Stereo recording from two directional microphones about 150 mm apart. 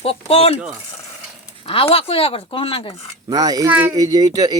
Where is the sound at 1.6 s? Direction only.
40° left (ahead or behind).